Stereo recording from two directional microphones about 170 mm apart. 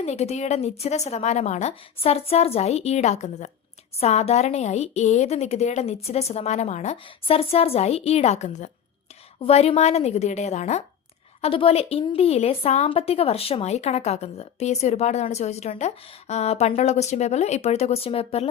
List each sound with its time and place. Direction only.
0.0 s a woman's voice: 40° left (ahead or behind)